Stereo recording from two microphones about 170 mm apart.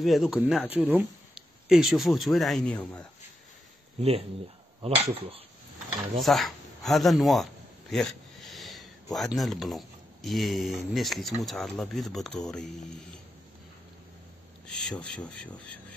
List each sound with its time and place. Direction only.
0.0 s speech: centre (ahead or behind)
4.0 s speech: 35° right (ahead or behind)
5.9 s speech: centre (ahead or behind)
14.9 s speech: 5° left (ahead or behind)